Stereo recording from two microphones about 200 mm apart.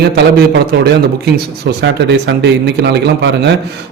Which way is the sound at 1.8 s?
60° right (ahead or behind).